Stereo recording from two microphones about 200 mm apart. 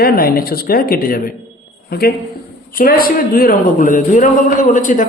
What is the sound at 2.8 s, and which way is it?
A man's voice, 45° left (ahead or behind).